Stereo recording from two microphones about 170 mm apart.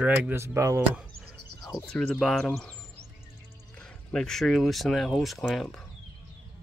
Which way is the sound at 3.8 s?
5° left (ahead or behind).